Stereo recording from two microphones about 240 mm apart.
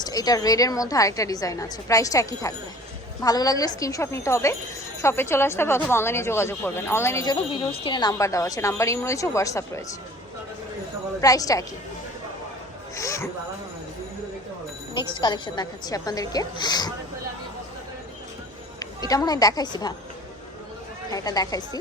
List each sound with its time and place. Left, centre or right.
0.0 s speech: centre
11.2 s speech: centre
13.0 s a sound: centre
14.9 s speech: centre
18.8 s a woman's voice: centre
21.1 s speech: centre